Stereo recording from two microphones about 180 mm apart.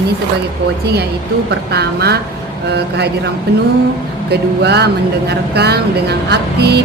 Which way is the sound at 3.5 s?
65° right (ahead or behind).